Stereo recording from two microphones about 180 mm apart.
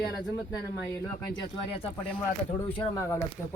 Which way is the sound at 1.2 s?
30° left (ahead or behind).